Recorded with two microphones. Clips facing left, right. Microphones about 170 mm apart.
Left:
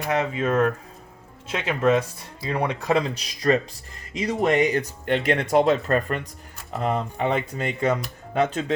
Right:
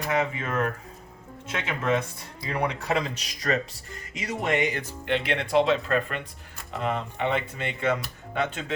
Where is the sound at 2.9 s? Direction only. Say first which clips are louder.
Left 4 dB; 35° left (ahead or behind).